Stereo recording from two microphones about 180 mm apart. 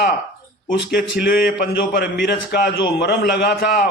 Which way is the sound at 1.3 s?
55° left (ahead or behind).